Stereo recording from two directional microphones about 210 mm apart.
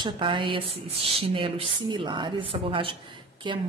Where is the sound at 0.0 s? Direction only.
25° right (ahead or behind).